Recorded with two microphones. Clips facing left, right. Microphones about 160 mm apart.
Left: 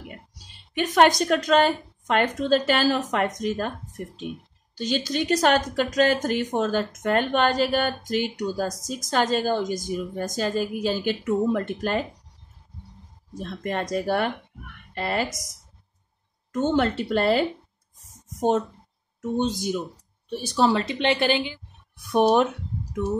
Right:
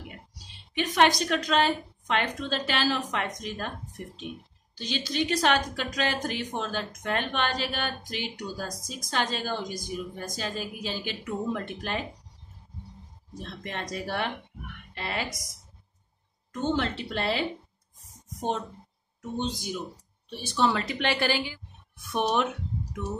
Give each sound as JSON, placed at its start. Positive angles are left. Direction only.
{"t": 0.7, "sound": "speech", "side_deg": 45}
{"t": 4.7, "sound": "speech", "side_deg": 45}
{"t": 13.4, "sound": "speech", "side_deg": 45}
{"t": 16.5, "sound": "speech", "side_deg": 45}
{"t": 20.2, "sound": "a woman's voice", "side_deg": 45}
{"t": 22.1, "sound": "speech", "side_deg": 35}